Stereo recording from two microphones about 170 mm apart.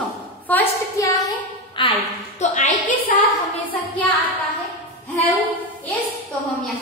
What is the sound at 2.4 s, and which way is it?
Speech, 45° left (ahead or behind).